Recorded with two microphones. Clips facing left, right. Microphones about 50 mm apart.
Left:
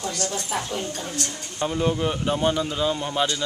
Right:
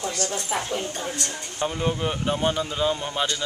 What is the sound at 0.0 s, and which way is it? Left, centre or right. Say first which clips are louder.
Speech: even; right.